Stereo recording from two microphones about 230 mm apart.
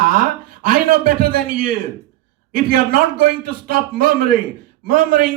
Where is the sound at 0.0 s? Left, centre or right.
Right.